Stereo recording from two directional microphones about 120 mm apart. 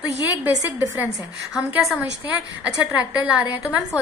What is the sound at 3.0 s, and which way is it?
Speech, 10° right (ahead or behind).